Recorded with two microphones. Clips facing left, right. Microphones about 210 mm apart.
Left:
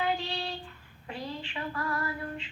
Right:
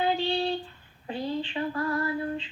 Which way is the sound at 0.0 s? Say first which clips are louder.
Right 6 dB; 30° right (ahead or behind).